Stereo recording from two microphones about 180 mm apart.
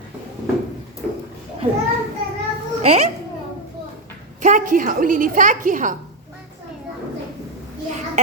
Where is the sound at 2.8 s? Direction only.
40° right (ahead or behind).